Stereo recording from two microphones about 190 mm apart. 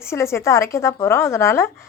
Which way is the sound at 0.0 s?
15° left (ahead or behind).